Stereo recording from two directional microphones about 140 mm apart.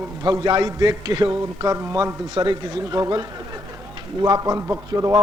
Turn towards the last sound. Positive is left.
turn(degrees=-25)  # may be behind; listen again after turning